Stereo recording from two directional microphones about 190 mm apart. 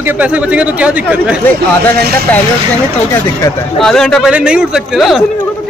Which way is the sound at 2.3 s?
10° left (ahead or behind).